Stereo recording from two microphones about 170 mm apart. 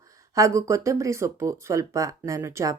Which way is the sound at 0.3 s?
20° right (ahead or behind).